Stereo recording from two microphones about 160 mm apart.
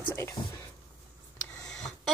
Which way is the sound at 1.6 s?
Centre (ahead or behind).